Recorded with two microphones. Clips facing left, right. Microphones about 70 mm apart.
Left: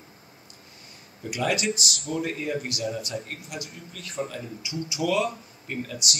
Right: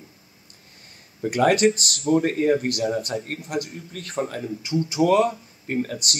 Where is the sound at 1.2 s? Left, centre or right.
Right.